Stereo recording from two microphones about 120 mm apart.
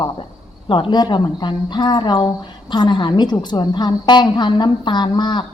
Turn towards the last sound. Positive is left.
turn(degrees=40)  # may be behind; listen again after turning